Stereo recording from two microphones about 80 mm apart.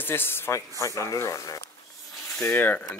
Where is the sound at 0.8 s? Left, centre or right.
Left.